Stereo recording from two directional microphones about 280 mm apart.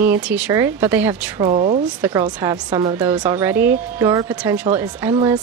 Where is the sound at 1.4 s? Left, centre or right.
Right.